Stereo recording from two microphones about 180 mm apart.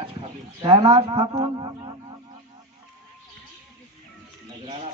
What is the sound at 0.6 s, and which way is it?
A man's voice, 30° right (ahead or behind).